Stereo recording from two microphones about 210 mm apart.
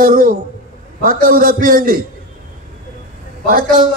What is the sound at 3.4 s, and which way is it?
Speech, 45° right (ahead or behind).